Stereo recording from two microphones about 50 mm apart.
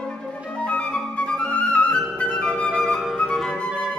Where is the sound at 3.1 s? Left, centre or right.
Centre.